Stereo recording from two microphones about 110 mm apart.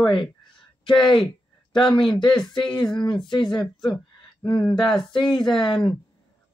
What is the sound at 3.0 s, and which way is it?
Speech, 45° left (ahead or behind).